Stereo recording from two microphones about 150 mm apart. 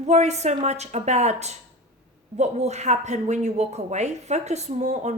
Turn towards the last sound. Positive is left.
turn(degrees=-50)  # may be behind; listen again after turning